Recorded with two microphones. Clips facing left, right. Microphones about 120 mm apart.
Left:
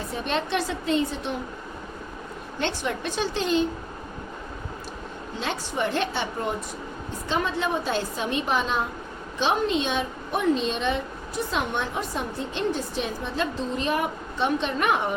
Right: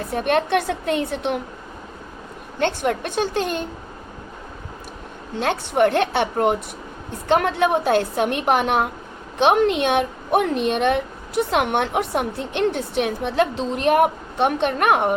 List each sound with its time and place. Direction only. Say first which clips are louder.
0.1 s a woman's voice: right 8 dB; 55° right (ahead or behind)
2.6 s a woman's voice: right 7 dB; 55° right (ahead or behind)
5.4 s a woman's voice: right 10 dB; 60° right (ahead or behind)